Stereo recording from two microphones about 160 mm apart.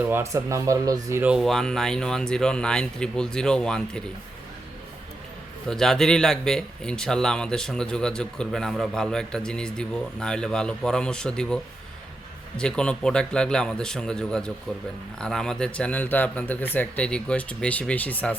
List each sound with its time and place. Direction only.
0.0 s speech: 15° right (ahead or behind)
1.2 s speech: 5° right (ahead or behind)
5.6 s a man's voice: 5° left (ahead or behind)